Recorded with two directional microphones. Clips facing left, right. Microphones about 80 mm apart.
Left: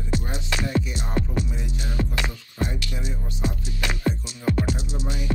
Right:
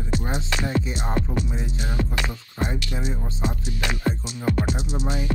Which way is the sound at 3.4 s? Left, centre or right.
Right.